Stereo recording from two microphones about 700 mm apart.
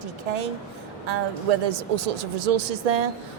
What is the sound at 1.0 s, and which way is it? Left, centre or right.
Speech, right.